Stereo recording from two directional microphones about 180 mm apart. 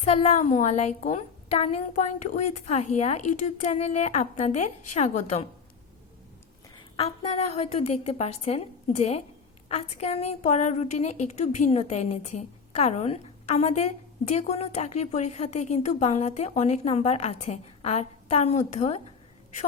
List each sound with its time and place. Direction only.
0.0 s a woman's voice: 35° left (ahead or behind)
6.9 s a woman's voice: 35° left (ahead or behind)